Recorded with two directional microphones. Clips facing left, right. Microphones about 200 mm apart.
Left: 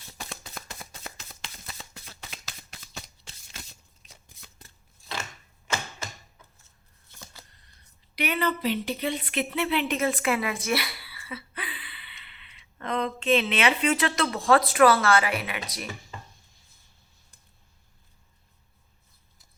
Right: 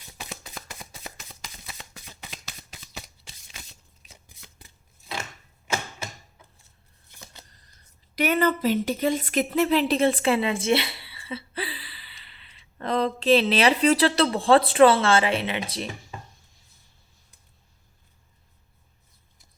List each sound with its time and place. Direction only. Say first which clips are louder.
0.2 s shuffling cards: right 1 dB; 5° right (ahead or behind)
2.5 s shuffling cards: right 1 dB; 5° right (ahead or behind)
8.1 s speech: right 5 dB; 45° right (ahead or behind); by 15.9 s 30° right (ahead or behind)